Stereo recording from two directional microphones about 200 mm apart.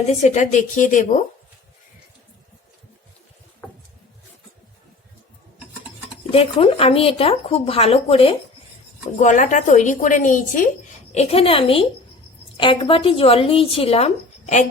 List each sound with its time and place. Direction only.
0.1 s speech: 35° left (ahead or behind)
6.3 s a woman's voice: 30° left (ahead or behind)